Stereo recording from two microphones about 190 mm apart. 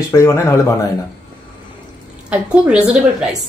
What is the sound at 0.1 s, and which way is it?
Speech, 15° left (ahead or behind).